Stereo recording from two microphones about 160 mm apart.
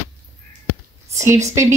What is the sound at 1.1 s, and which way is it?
Speech, 20° right (ahead or behind).